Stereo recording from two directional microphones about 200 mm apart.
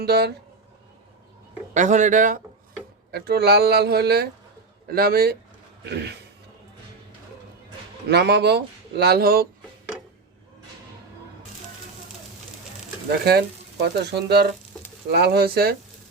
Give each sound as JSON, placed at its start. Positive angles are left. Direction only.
{"t": 0.0, "sound": "speech", "side_deg": -55}
{"t": 1.7, "sound": "speech", "side_deg": -35}
{"t": 3.1, "sound": "speech", "side_deg": -55}
{"t": 8.1, "sound": "speech", "side_deg": -55}
{"t": 13.1, "sound": "speech", "side_deg": -50}